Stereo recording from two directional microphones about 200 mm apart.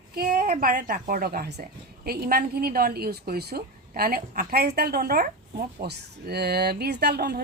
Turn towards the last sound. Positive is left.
turn(degrees=-55)  # may be behind; listen again after turning